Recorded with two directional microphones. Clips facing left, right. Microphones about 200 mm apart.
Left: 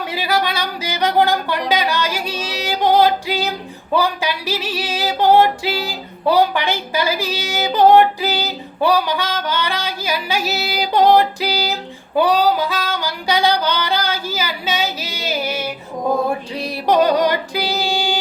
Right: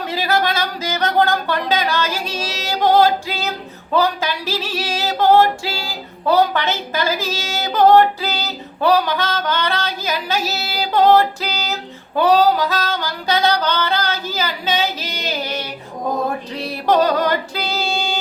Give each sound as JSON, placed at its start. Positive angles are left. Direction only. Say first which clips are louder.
{"t": 0.1, "sound": "female singing", "louder": "right 2 dB", "side_deg": 15}
{"t": 16.8, "sound": "female singing", "louder": "left 1 dB", "side_deg": 15}